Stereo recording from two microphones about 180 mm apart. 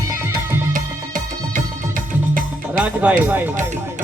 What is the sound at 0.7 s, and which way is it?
Music, 50° right (ahead or behind).